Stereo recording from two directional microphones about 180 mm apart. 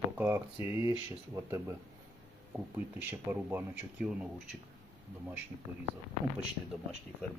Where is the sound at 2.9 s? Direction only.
10° right (ahead or behind).